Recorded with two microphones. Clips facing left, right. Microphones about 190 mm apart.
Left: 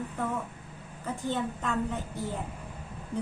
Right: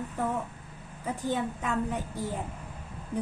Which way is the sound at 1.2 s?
10° right (ahead or behind).